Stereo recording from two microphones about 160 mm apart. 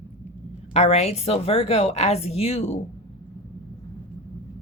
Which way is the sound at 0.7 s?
45° left (ahead or behind).